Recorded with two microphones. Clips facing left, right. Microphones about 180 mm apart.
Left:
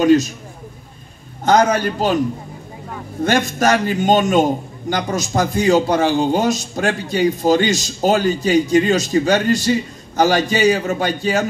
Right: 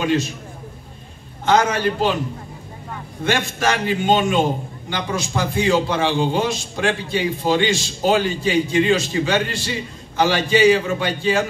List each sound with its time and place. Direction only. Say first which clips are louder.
0.0 s a man's voice: left 7 dB; 40° left (ahead or behind)
1.4 s a man's voice: left 3 dB; 40° left (ahead or behind)
3.3 s a man's voice: left 4 dB; 40° left (ahead or behind)